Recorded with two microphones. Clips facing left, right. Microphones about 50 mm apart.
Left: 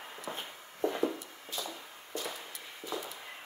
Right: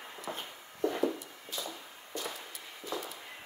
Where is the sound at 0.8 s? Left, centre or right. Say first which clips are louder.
Even; centre.